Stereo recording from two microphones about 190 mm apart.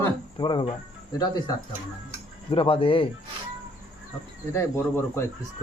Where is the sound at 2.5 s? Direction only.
30° left (ahead or behind).